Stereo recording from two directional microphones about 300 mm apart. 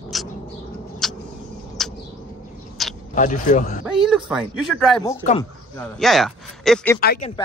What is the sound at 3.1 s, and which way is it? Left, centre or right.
Speech, left.